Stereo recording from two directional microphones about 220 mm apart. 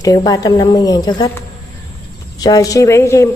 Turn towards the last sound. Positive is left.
turn(degrees=15)  # may be behind; listen again after turning